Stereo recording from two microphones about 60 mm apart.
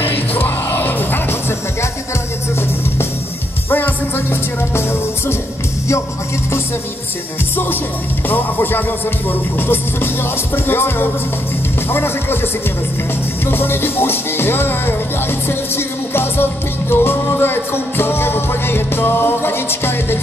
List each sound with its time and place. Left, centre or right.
0.0 s music: left
3.7 s music: left
7.5 s music: left
13.5 s music: left